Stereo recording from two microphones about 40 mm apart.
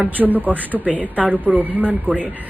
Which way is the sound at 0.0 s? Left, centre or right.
Right.